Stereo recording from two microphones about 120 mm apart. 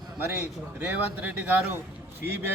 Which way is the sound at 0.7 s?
10° right (ahead or behind).